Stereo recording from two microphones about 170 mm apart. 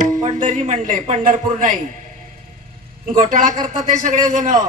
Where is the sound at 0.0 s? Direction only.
50° right (ahead or behind).